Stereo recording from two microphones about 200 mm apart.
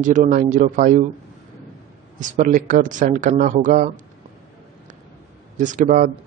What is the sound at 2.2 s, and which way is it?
Speech, 40° right (ahead or behind).